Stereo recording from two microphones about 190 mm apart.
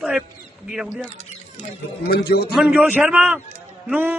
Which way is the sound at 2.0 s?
55° left (ahead or behind).